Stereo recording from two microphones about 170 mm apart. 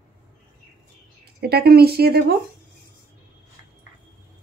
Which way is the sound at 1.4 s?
70° right (ahead or behind).